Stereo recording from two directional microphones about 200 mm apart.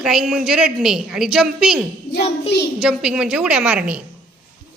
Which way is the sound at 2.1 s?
55° left (ahead or behind).